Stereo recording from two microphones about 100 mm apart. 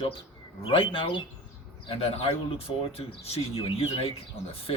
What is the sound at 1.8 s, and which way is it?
Speech, 80° left.